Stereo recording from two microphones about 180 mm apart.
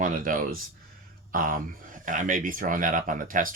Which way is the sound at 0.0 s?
50° right (ahead or behind).